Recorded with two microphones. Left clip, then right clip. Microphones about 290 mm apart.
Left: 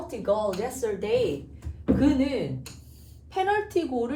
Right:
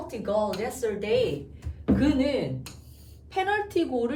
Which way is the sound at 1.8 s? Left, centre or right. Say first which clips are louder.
Left 1 dB; centre.